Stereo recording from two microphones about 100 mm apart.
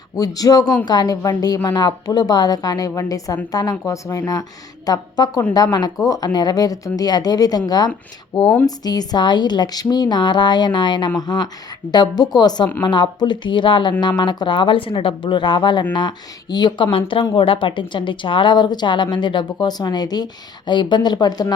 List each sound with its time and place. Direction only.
0.2 s a woman's voice: 35° left (ahead or behind)